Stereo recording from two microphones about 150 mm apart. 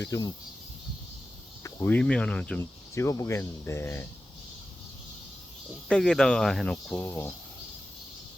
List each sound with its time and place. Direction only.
0.0 s speech: 25° left (ahead or behind)
1.6 s speech: 15° left (ahead or behind)
5.9 s speech: 5° left (ahead or behind)
6.9 s speech: 15° left (ahead or behind)